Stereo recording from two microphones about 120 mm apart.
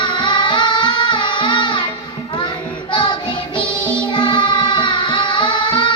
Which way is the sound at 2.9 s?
40° left (ahead or behind).